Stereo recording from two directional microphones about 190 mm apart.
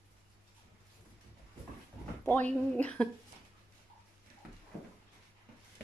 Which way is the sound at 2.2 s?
10° left (ahead or behind).